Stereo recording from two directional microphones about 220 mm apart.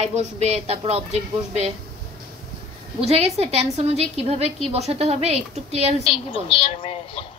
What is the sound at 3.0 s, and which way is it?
A woman's voice, 30° right (ahead or behind).